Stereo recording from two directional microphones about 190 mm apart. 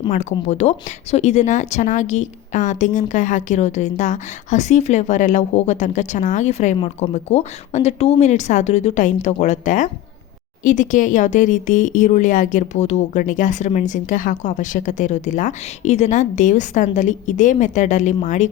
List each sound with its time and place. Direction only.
0.1 s speech: 40° left (ahead or behind)